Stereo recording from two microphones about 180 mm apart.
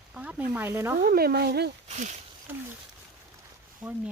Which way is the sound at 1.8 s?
40° right (ahead or behind).